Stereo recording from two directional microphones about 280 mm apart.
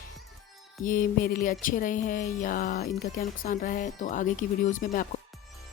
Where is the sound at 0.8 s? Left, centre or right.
Left.